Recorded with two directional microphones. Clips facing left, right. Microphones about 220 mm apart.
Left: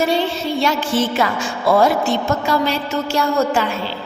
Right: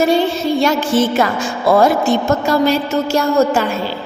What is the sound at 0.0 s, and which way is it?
A woman's voice, 45° right (ahead or behind).